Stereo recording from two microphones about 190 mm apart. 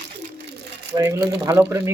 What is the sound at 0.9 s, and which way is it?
A man's voice, 15° right (ahead or behind).